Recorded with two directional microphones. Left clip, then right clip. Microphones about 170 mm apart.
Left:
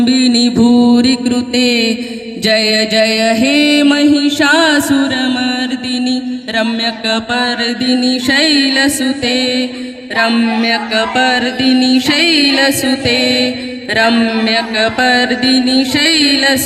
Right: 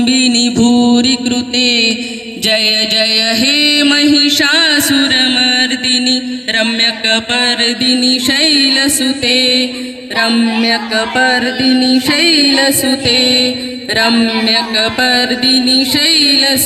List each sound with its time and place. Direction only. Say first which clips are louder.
0.0 s mantra: even; 50° left (ahead or behind)
2.4 s music: even; 55° left (ahead or behind); by 16.6 s 15° left (ahead or behind)